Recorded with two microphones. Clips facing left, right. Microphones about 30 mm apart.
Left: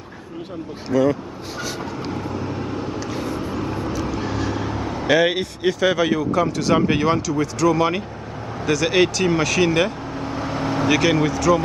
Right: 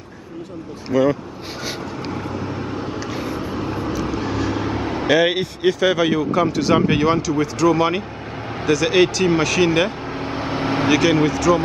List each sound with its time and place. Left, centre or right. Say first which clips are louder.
0.8 s speech: right 1 dB; centre
2.0 s vehicle: right 1 dB; centre
5.0 s speech: right 1 dB; centre
9.7 s speech: right 1 dB; centre
10.1 s vehicle: right 2 dB; right
10.9 s speech: right 2 dB; centre